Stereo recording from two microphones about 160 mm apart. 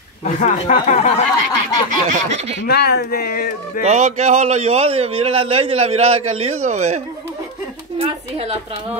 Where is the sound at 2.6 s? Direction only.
90° left; by 3.8 s 65° left (ahead or behind).